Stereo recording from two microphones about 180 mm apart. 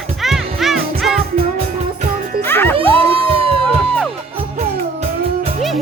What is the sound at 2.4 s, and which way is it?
Music, 10° left (ahead or behind).